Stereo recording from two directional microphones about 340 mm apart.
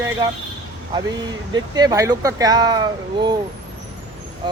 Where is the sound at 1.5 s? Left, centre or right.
Centre.